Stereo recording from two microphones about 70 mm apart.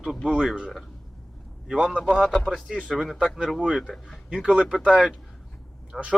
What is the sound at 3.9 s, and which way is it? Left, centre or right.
Speech, centre.